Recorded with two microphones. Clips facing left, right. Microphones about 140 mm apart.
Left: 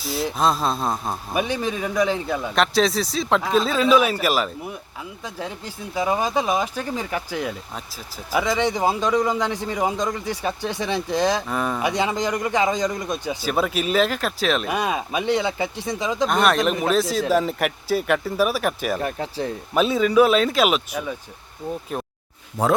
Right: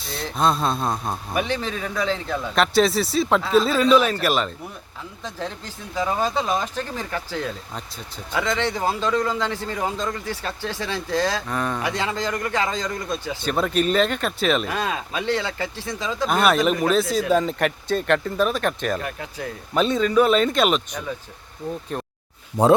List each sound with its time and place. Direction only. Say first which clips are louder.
0.0 s speech: left 1 dB; centre (ahead or behind)
1.3 s a man's voice: left 2 dB; 15° left (ahead or behind)
2.6 s a man's voice: right 2 dB; centre (ahead or behind); by 11.4 s 15° left (ahead or behind)
11.4 s a man's voice: left 2 dB; 5° left (ahead or behind)
13.4 s speech: right 3 dB; 5° left (ahead or behind)
14.7 s a man's voice: left 3 dB; 15° left (ahead or behind)
16.2 s a man's voice: right 1 dB; 5° right (ahead or behind)
19.0 s speech: left 5 dB; 30° left (ahead or behind)
19.7 s speech: left 1 dB; 5° left (ahead or behind)
22.5 s speech: right 4 dB; 15° right (ahead or behind)